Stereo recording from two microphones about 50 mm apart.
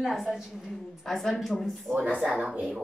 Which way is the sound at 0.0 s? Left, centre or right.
Centre.